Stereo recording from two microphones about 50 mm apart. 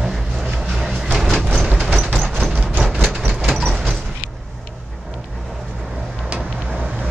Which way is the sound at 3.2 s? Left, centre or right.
Centre.